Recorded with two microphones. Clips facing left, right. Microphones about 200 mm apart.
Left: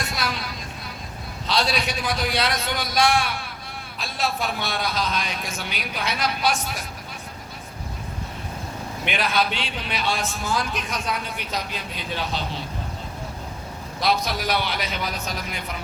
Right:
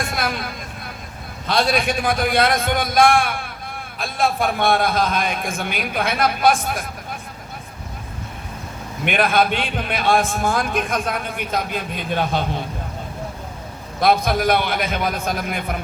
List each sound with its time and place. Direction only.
0.0 s a sound: 55° right (ahead or behind)
1.5 s a man's voice: 50° right (ahead or behind)
9.0 s a man's voice: 55° right (ahead or behind)
14.0 s a man's voice: 55° right (ahead or behind)